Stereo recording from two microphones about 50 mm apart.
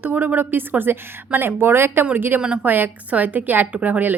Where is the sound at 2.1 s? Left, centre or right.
Right.